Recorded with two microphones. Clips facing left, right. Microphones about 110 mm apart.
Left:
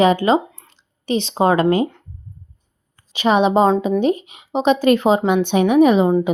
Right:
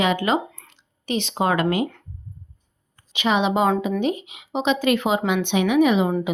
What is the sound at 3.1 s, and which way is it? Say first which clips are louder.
Speech: left 5 dB; 40° left (ahead or behind).